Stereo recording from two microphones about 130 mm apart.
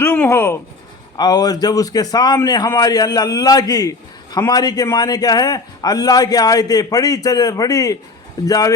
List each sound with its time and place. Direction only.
0.0 s speech: 15° left (ahead or behind)
1.1 s a man's voice: 30° left (ahead or behind)